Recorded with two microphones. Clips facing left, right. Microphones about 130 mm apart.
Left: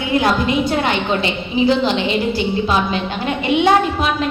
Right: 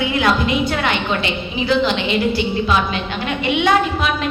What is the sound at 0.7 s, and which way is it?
A woman's voice, 30° left (ahead or behind).